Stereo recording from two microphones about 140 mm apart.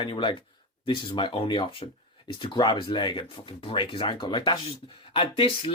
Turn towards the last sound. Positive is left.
turn(degrees=40)  # may be behind; listen again after turning